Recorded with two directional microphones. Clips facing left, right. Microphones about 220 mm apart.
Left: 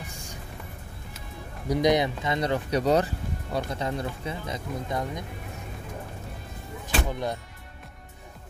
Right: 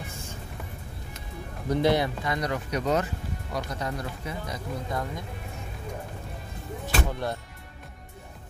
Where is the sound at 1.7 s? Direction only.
15° left (ahead or behind).